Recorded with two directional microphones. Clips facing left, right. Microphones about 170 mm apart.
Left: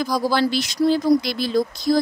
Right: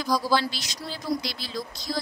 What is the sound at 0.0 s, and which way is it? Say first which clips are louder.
A woman's voice: left 4 dB; 50° left (ahead or behind).